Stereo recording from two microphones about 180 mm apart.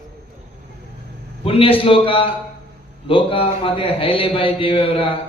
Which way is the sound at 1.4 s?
30° left (ahead or behind).